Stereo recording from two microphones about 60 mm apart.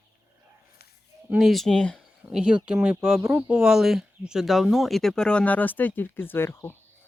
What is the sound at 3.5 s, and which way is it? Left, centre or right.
Speech, centre.